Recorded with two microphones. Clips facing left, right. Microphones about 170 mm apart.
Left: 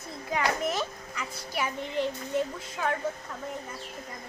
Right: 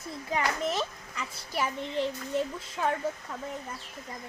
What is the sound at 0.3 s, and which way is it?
Speech, 30° right (ahead or behind).